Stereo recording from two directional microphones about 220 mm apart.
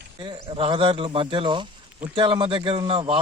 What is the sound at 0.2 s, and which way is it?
Speech, 20° right (ahead or behind).